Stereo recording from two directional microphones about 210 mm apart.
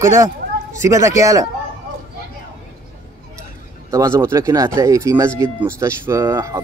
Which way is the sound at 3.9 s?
15° right (ahead or behind).